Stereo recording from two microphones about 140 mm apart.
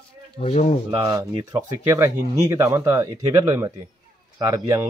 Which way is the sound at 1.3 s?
35° right (ahead or behind).